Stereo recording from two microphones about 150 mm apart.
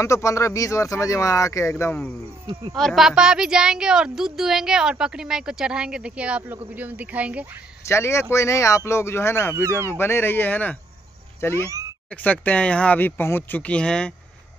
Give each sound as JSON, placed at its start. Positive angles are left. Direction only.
{"t": 0.0, "sound": "speech", "side_deg": 20}
{"t": 2.7, "sound": "a woman's voice", "side_deg": 0}
{"t": 7.8, "sound": "speech", "side_deg": 15}
{"t": 9.5, "sound": "speech", "side_deg": -15}
{"t": 9.8, "sound": "speech", "side_deg": 15}
{"t": 11.5, "sound": "speech", "side_deg": -20}
{"t": 12.1, "sound": "speech", "side_deg": 10}